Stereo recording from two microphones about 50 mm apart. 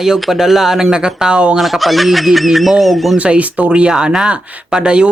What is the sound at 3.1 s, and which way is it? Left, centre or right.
Speech, right.